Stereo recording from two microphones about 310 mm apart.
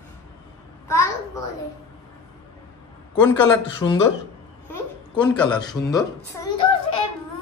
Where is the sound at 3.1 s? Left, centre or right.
Centre.